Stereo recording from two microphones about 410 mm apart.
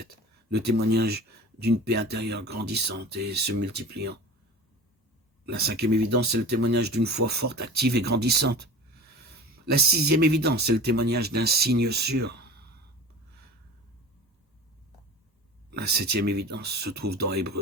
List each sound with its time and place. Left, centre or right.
0.5 s speech: right
5.5 s speech: right
9.6 s speech: right
15.8 s speech: right